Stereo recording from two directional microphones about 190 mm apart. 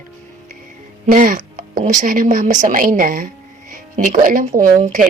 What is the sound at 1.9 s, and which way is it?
A woman's voice, 40° right (ahead or behind).